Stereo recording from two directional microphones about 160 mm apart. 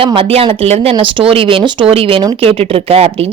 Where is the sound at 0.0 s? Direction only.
35° right (ahead or behind).